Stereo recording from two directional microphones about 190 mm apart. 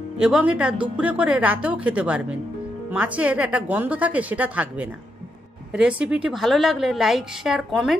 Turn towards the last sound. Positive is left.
turn(degrees=0)  # may be behind; listen again after turning